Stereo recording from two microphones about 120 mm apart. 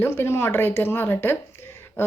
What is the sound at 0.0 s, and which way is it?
A woman's voice, 20° left (ahead or behind).